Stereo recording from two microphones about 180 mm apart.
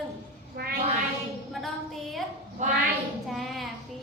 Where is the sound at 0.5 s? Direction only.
55° right (ahead or behind).